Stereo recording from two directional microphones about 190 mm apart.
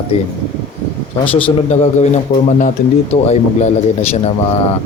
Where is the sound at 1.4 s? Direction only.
35° left (ahead or behind).